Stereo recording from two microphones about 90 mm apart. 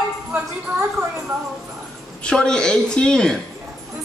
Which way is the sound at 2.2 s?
10° left (ahead or behind).